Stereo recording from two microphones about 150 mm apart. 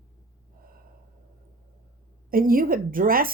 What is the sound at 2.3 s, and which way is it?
A woman's voice, 70° right (ahead or behind).